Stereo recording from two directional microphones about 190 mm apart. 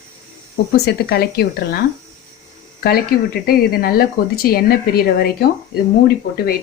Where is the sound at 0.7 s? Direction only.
55° left (ahead or behind).